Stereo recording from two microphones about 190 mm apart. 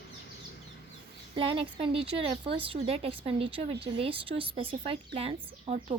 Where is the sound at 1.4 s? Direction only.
30° right (ahead or behind).